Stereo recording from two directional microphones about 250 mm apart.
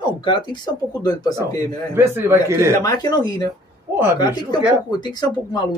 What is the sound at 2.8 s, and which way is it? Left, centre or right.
Speech, centre.